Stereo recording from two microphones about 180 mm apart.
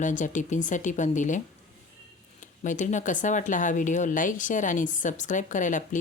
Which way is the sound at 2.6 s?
45° left (ahead or behind).